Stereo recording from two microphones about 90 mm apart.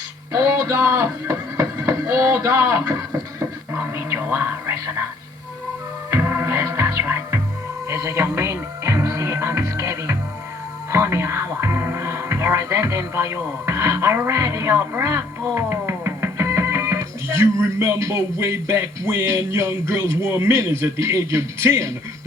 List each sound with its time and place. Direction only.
0.3 s a sound: 35° right (ahead or behind)
6.1 s music: 30° right (ahead or behind)
10.9 s speech: 30° right (ahead or behind)